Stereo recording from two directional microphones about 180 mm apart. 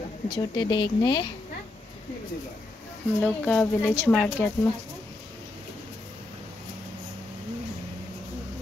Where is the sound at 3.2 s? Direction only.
5° left (ahead or behind).